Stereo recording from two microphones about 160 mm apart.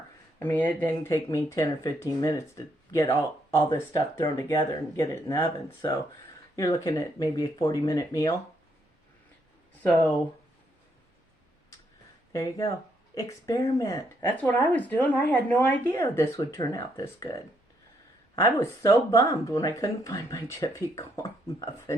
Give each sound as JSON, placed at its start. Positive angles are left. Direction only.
{"t": 0.3, "sound": "speech", "side_deg": 10}
{"t": 6.6, "sound": "speech", "side_deg": 20}
{"t": 12.3, "sound": "speech", "side_deg": 20}
{"t": 18.3, "sound": "speech", "side_deg": 20}